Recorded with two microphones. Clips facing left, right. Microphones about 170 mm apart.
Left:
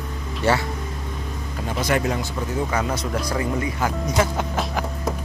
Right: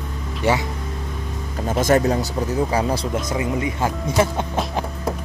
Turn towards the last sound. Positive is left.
turn(degrees=-25)  # may be behind; listen again after turning